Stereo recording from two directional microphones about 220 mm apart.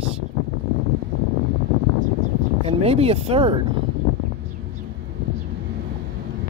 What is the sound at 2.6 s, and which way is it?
Speech, 25° right (ahead or behind).